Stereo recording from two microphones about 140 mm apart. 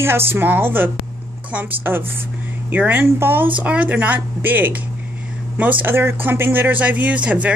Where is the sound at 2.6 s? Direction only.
15° right (ahead or behind).